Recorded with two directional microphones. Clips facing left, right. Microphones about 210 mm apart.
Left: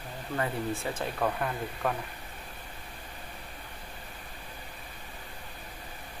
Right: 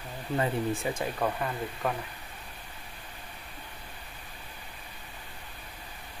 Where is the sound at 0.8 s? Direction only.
10° right (ahead or behind).